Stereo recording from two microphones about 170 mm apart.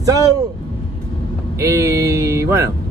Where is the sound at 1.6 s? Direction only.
15° right (ahead or behind).